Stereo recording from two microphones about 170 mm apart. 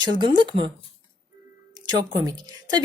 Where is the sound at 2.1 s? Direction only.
20° right (ahead or behind).